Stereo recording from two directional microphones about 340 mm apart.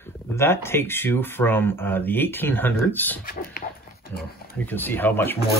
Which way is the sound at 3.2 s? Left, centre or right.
Left.